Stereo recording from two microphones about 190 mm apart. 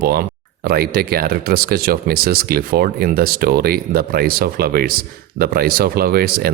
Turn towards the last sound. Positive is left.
turn(degrees=-55)  # may be behind; listen again after turning